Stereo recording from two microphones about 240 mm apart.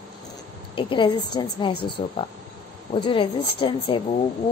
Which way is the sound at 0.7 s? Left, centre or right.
Left.